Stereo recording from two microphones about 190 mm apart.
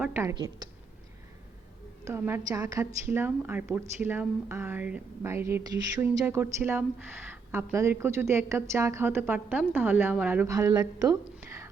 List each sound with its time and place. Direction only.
0.0 s a woman's voice: 10° right (ahead or behind)
2.0 s a woman's voice: 10° right (ahead or behind)